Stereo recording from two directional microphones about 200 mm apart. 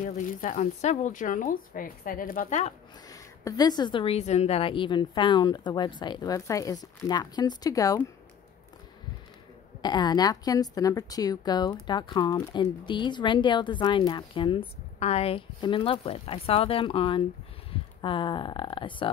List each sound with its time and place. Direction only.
0.0 s speech: 40° left (ahead or behind)
3.1 s speech: 20° left (ahead or behind)
9.8 s speech: 20° left (ahead or behind)